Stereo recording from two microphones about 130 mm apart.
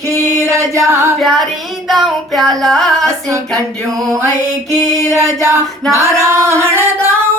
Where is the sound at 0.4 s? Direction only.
20° right (ahead or behind).